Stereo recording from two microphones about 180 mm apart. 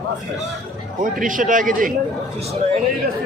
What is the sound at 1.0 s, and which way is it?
Speech, 45° right (ahead or behind).